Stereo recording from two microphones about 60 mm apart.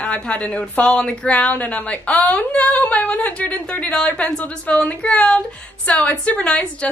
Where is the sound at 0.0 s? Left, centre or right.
Centre.